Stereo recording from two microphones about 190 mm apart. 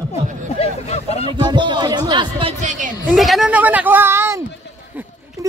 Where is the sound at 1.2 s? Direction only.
25° right (ahead or behind); by 2.9 s 40° right (ahead or behind).